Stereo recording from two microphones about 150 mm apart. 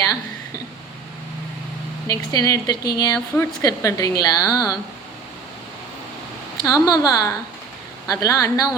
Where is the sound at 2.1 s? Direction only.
25° left (ahead or behind).